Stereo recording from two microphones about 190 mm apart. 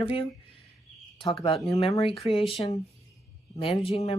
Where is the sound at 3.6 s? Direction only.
30° left (ahead or behind).